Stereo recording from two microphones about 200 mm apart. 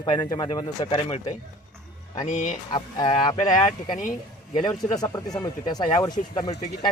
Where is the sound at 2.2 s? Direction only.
40° left (ahead or behind).